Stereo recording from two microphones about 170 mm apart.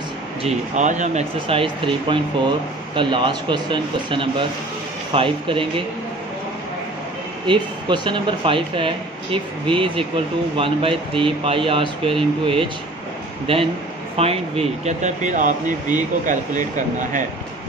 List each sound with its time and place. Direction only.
0.4 s speech: 45° right (ahead or behind); by 5.7 s 30° right (ahead or behind)
7.4 s speech: 30° right (ahead or behind); by 17.2 s 50° right (ahead or behind)